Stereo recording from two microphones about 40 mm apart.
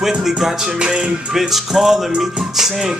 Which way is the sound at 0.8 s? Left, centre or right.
Right.